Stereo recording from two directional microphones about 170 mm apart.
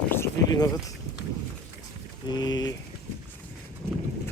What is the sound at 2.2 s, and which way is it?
Speech, 25° left (ahead or behind).